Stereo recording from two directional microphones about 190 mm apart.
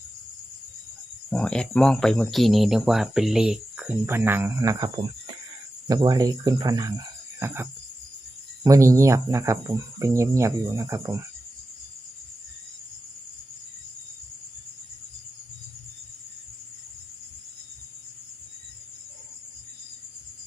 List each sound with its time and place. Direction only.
1.3 s speech: 5° left (ahead or behind); by 5.4 s 25° right (ahead or behind)
5.9 s cricket: 20° right (ahead or behind)
8.6 s speech: 15° right (ahead or behind)